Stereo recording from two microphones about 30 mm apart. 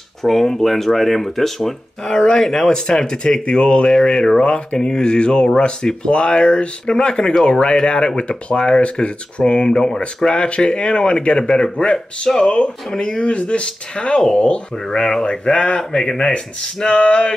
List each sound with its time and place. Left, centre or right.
0.2 s speech: centre
3.4 s speech: left
4.0 s speech: centre
8.2 s speech: left
9.7 s speech: left
12.9 s speech: centre
13.2 s speech: left
14.9 s speech: centre
15.4 s speech: left
17.0 s speech: left